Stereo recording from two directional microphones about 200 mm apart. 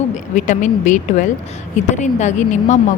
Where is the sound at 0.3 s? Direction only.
40° left (ahead or behind).